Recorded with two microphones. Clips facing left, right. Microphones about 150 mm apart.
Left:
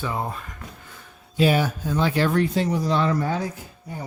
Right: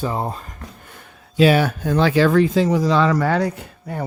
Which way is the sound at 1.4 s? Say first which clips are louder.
Right 5 dB; 80° right.